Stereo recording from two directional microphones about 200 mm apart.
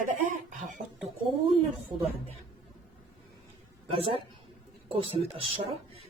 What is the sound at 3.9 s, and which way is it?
Speech, 30° right (ahead or behind).